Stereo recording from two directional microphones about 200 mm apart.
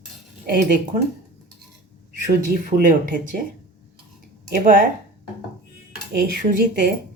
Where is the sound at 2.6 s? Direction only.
45° right (ahead or behind).